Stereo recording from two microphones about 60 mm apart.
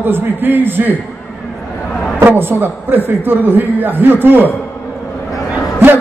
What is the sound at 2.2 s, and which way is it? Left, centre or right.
A man's voice, right.